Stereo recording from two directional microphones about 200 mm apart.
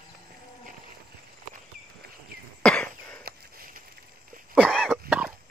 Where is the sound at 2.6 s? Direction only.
5° left (ahead or behind).